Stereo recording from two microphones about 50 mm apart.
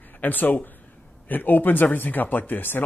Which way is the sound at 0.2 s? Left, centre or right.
Left.